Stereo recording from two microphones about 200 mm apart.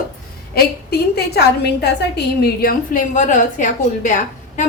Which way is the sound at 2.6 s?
45° left (ahead or behind).